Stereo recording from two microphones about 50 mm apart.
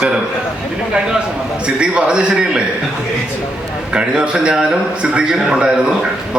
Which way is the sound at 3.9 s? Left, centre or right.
Centre.